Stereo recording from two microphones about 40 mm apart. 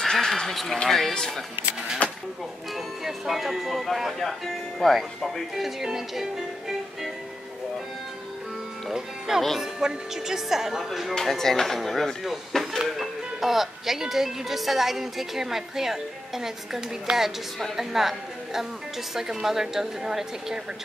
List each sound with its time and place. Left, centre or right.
0.0 s a sound: centre
0.8 s speech: centre
2.0 s a sound: left
3.0 s speech: centre
9.6 s speech: centre
11.1 s speech: centre
17.1 s a woman's voice: right
17.7 s speech: centre